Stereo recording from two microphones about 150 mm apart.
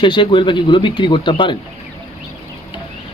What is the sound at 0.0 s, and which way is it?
Speech, 30° left (ahead or behind).